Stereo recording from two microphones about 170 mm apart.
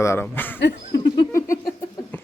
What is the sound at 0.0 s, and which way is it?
Speech, 15° left (ahead or behind).